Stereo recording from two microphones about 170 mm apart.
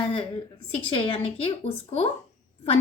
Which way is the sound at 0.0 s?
30° left (ahead or behind).